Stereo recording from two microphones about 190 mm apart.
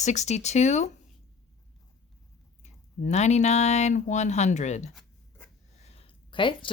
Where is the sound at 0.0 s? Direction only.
35° left (ahead or behind).